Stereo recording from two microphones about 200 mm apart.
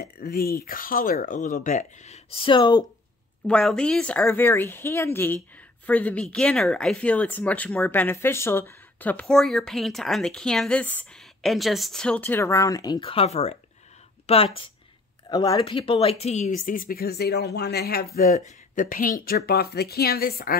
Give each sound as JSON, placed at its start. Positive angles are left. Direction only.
{"t": 0.0, "sound": "speech", "side_deg": 50}
{"t": 3.4, "sound": "speech", "side_deg": 5}